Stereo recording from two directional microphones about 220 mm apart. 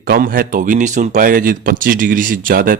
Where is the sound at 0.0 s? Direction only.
40° right (ahead or behind).